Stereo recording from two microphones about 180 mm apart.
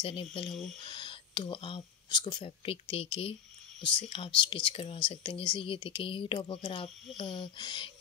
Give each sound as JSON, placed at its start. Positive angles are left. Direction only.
{"t": 0.0, "sound": "speech", "side_deg": 30}